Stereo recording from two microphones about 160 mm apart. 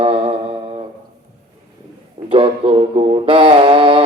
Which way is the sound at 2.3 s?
35° right (ahead or behind).